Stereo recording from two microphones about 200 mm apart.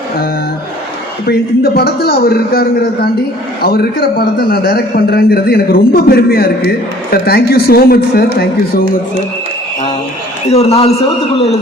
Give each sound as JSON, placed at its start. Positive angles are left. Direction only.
{"t": 1.3, "sound": "a man's voice", "side_deg": 50}
{"t": 10.5, "sound": "a man's voice", "side_deg": 30}